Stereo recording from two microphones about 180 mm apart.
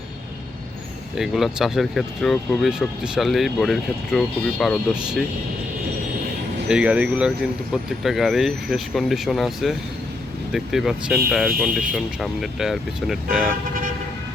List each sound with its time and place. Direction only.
1.1 s speech: centre (ahead or behind)
6.7 s speech: 5° right (ahead or behind)